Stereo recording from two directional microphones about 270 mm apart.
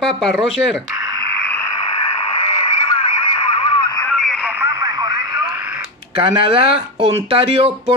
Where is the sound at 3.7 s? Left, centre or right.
Centre.